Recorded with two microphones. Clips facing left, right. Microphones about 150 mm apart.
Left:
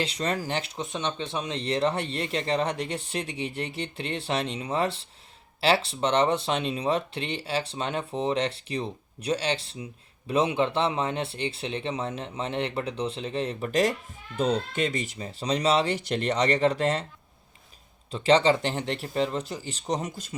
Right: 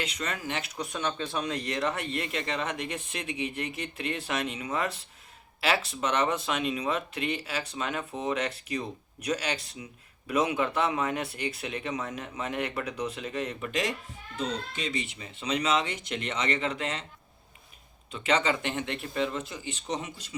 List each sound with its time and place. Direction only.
0.0 s speech: 30° left (ahead or behind)
14.3 s speech: 55° left (ahead or behind); by 17.1 s 40° left (ahead or behind)
18.1 s speech: 30° left (ahead or behind)